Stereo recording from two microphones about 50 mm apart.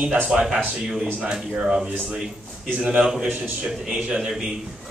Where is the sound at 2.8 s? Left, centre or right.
Right.